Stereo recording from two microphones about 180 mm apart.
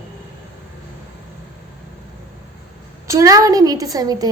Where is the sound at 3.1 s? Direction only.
20° right (ahead or behind).